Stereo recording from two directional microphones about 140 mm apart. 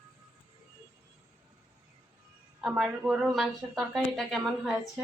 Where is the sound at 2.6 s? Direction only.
5° right (ahead or behind).